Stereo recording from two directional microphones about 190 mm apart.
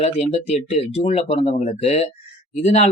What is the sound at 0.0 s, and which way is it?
Speech, 35° left (ahead or behind).